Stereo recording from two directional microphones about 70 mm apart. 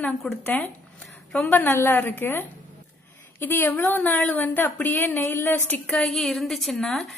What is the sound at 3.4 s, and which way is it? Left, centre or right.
A woman's voice, left.